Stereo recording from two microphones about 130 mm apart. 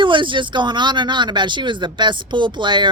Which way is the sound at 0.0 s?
40° right (ahead or behind).